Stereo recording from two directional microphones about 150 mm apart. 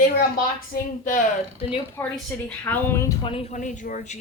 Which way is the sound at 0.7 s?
90° left.